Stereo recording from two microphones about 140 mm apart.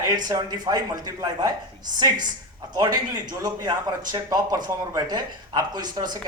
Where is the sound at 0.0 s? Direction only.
30° right (ahead or behind).